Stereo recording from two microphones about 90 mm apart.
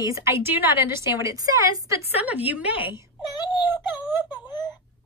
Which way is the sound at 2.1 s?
20° right (ahead or behind).